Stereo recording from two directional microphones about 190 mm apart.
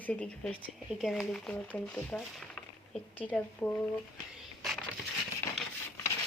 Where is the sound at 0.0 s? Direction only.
5° left (ahead or behind).